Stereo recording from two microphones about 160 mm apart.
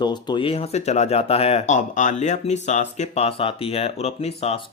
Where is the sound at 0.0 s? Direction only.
30° left (ahead or behind).